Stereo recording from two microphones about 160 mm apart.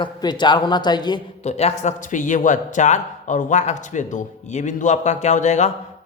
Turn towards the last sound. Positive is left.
turn(degrees=45)  # may be behind; listen again after turning